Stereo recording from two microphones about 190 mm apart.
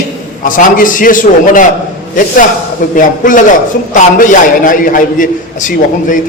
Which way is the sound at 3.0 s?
45° left (ahead or behind).